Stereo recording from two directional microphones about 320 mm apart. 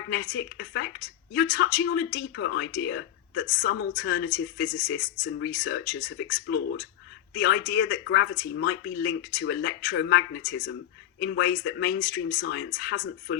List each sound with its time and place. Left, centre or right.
0.1 s speech: left